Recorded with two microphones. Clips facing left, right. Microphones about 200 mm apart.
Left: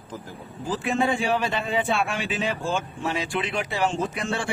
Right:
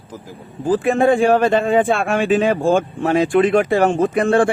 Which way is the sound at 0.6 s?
50° right (ahead or behind).